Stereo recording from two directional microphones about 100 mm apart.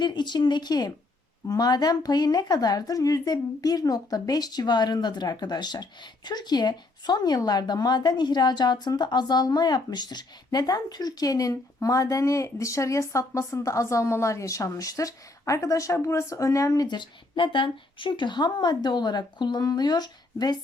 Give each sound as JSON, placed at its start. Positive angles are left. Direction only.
{"t": 0.0, "sound": "a woman's voice", "side_deg": 50}